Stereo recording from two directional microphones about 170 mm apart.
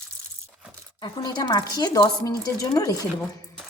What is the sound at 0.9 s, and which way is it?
Speech, 25° left (ahead or behind).